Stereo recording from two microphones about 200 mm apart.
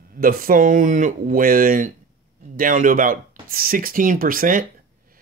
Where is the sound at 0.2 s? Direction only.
45° right (ahead or behind).